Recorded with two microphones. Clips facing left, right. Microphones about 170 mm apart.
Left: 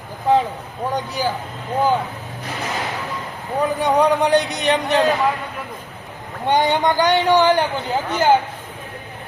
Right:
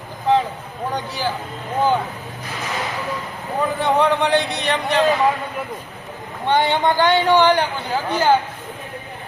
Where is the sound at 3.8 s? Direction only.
15° left (ahead or behind).